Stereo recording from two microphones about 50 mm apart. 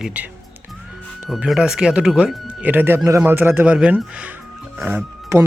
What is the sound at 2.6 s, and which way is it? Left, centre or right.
Speech, right.